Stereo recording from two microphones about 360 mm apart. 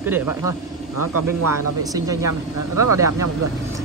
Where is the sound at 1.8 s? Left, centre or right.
Centre.